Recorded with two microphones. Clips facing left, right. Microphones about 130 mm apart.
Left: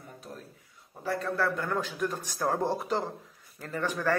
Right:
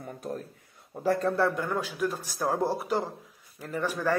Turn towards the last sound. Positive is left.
turn(degrees=-10)  # may be behind; listen again after turning